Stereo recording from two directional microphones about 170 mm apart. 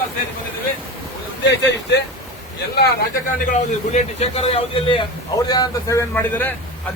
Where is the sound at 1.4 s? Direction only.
90° left.